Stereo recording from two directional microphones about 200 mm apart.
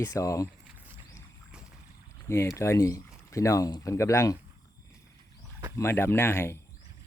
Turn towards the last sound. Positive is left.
turn(degrees=10)  # may be behind; listen again after turning